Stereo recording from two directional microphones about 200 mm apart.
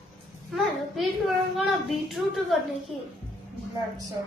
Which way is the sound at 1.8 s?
Centre (ahead or behind).